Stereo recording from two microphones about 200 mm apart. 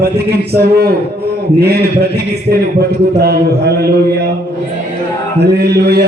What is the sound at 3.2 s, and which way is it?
Speech, 55° right (ahead or behind).